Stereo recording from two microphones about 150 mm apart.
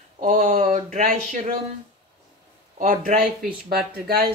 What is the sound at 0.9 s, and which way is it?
Speech, 65° right (ahead or behind).